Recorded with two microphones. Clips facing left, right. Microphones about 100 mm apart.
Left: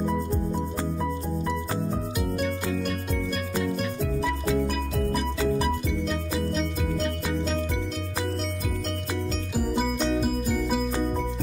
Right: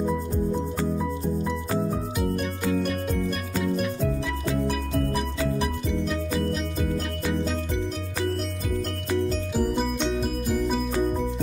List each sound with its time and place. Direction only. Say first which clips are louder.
3.6 s music: right 2 dB; centre (ahead or behind)
6.3 s music: right 1 dB; centre (ahead or behind)
9.6 s music: even; centre (ahead or behind)